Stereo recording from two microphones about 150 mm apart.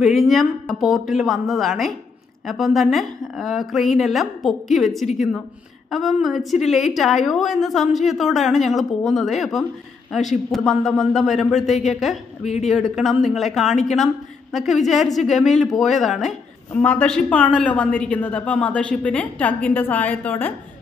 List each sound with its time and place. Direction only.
0.0 s a woman's voice: centre (ahead or behind)
11.6 s a woman's voice: 50° left (ahead or behind)
11.9 s a woman's voice: centre (ahead or behind)